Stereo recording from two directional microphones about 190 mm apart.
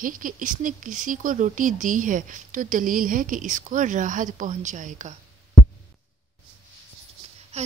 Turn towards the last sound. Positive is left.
turn(degrees=-35)  # may be behind; listen again after turning